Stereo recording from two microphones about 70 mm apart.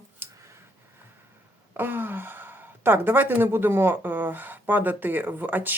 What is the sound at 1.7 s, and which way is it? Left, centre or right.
Speech, right.